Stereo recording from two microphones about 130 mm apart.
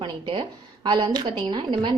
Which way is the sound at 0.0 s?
40° right (ahead or behind).